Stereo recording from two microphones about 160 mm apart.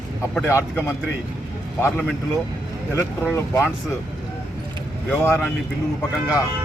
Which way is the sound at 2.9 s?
15° left (ahead or behind).